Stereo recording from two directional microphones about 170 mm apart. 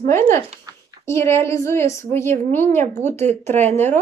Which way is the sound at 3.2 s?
40° right (ahead or behind).